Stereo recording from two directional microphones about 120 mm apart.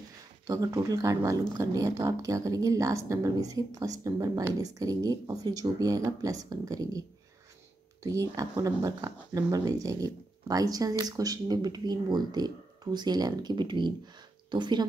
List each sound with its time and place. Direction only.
0.5 s a woman's voice: 30° right (ahead or behind)